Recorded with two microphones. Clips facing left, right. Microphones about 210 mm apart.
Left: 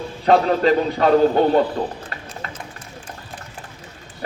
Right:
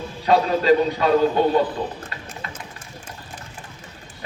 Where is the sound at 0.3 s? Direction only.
50° left (ahead or behind).